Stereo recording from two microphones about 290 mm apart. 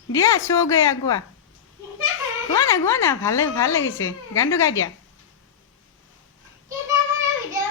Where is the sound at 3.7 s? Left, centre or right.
Left.